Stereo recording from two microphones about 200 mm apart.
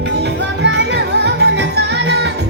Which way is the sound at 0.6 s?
60° right (ahead or behind).